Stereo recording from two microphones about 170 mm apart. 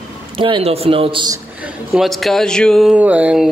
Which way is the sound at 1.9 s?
Centre (ahead or behind).